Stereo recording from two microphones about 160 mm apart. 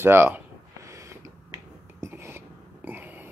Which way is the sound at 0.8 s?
20° right (ahead or behind).